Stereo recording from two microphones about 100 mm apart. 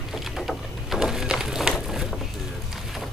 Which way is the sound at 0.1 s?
Centre (ahead or behind).